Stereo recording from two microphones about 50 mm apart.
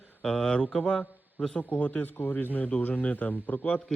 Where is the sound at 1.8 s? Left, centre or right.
Left.